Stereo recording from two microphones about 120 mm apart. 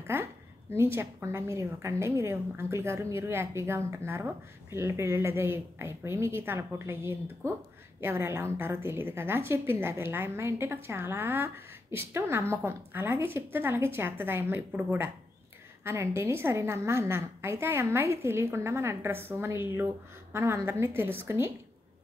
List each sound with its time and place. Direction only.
0.0 s a woman's voice: 20° right (ahead or behind)